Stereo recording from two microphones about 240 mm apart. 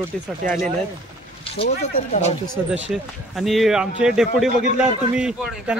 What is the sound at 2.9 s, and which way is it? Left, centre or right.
Speech, centre.